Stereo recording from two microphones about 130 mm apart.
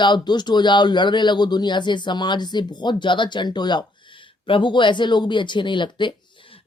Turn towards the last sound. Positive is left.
turn(degrees=35)  # may be behind; listen again after turning